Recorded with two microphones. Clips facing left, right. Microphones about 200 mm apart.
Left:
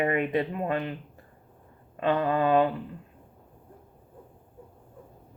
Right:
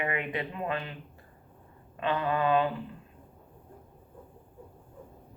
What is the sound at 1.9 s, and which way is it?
Speech, 40° left (ahead or behind).